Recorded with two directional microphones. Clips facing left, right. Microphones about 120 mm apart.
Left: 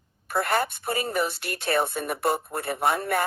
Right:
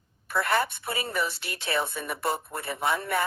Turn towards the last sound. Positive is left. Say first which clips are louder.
# left 3 dB
turn(degrees=50)  # may be behind; listen again after turning